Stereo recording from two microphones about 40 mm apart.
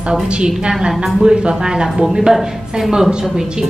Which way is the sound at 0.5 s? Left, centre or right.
Centre.